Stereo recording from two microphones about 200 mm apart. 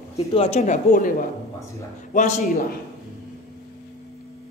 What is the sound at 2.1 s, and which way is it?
Speech, 35° left (ahead or behind).